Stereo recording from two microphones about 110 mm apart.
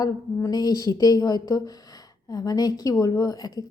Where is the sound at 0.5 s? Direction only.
35° left (ahead or behind).